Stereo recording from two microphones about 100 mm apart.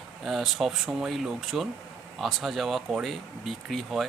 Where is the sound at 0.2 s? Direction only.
Centre (ahead or behind).